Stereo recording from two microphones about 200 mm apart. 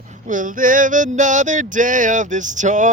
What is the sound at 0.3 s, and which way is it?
Male singing, 40° right (ahead or behind).